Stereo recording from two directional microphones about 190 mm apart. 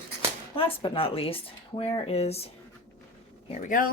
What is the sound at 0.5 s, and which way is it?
Speech, 30° left (ahead or behind).